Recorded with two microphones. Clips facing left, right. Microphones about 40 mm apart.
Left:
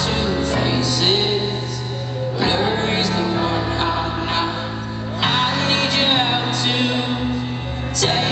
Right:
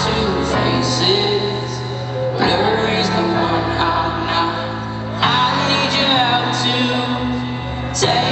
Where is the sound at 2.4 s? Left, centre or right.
Centre.